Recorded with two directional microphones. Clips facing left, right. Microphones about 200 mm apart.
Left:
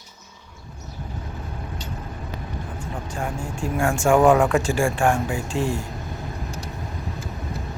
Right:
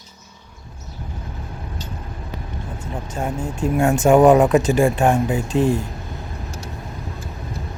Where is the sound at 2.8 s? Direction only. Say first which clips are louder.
Right 4 dB; 20° right (ahead or behind).